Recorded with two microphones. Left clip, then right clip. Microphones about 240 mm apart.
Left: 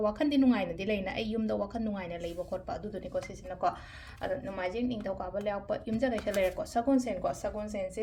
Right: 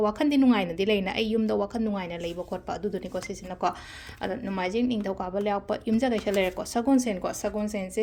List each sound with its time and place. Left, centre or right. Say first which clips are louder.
0.0 s a woman's voice: right 4 dB; right